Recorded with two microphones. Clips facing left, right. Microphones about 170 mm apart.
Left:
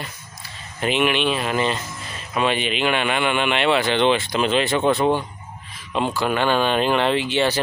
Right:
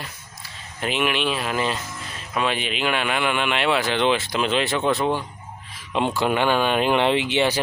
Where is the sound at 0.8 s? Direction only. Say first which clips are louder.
Left 3 dB; centre (ahead or behind).